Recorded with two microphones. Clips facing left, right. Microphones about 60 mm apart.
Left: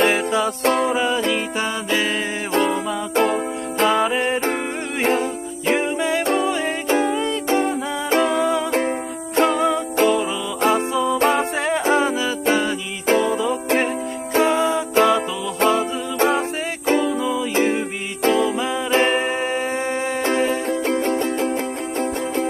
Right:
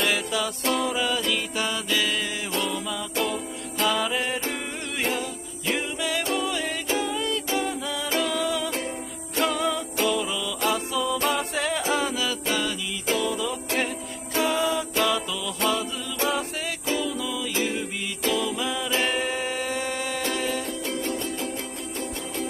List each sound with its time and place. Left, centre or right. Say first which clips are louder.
0.0 s music: left 7 dB; left
5.7 s music: left 8 dB; left